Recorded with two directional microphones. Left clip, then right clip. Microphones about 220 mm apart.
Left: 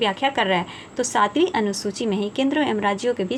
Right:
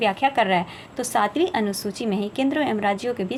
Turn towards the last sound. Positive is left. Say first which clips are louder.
# left 2 dB
turn(degrees=5)  # may be behind; listen again after turning